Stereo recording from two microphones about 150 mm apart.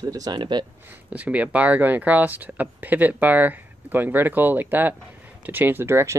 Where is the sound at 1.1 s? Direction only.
10° right (ahead or behind).